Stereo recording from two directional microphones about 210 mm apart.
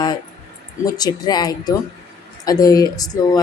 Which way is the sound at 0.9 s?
20° left (ahead or behind).